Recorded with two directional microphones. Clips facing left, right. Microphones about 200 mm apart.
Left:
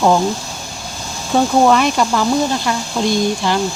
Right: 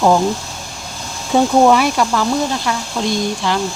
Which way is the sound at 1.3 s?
5° right (ahead or behind).